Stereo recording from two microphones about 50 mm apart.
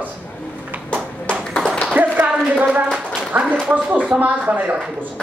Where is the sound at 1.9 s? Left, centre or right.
Right.